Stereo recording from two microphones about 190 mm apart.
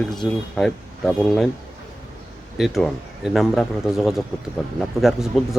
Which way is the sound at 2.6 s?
Centre (ahead or behind).